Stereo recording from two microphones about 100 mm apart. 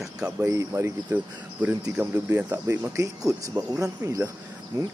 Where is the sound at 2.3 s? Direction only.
25° right (ahead or behind).